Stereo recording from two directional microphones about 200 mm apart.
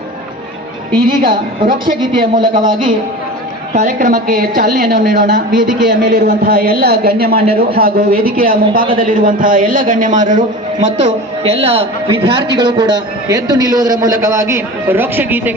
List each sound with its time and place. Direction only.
2.0 s a man's voice: 25° right (ahead or behind)
3.8 s a man's voice: 40° right (ahead or behind); by 15.5 s 10° right (ahead or behind)